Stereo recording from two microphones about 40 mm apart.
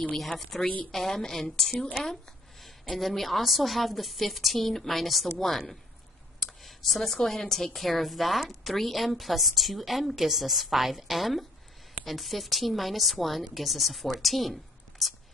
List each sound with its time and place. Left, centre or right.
0.3 s a woman's voice: centre